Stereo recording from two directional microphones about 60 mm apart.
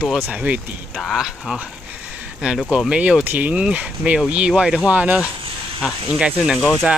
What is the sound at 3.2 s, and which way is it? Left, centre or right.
Speech, right.